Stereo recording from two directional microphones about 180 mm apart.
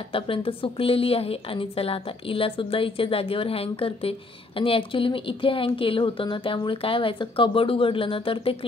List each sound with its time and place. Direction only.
0.1 s a woman's voice: 30° left (ahead or behind)